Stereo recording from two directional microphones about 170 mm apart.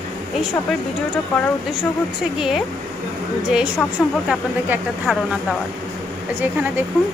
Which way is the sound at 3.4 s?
5° right (ahead or behind).